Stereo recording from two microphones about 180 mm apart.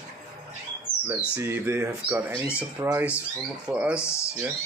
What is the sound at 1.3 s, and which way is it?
Speech, 15° right (ahead or behind).